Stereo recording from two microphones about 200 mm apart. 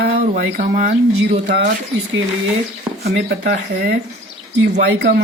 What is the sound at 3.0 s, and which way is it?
Speech, 50° right (ahead or behind).